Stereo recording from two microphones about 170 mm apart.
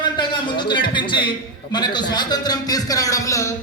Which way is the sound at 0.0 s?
25° left (ahead or behind).